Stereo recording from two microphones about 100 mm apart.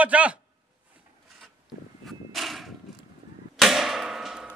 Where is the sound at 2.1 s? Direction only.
Centre (ahead or behind).